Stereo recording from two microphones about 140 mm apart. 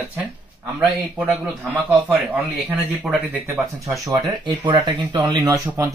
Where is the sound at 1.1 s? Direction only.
10° right (ahead or behind).